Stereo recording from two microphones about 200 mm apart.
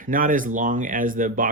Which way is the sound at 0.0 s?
45° right (ahead or behind).